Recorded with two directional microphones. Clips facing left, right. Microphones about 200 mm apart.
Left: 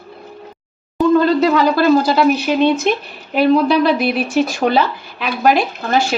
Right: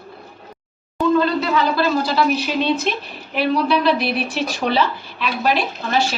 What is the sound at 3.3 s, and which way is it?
Speech, 45° left (ahead or behind).